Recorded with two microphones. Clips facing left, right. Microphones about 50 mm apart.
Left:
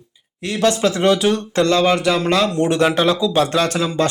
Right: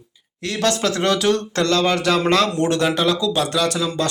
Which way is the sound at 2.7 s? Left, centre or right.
Left.